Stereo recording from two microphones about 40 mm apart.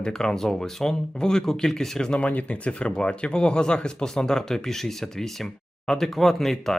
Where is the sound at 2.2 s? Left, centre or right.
Left.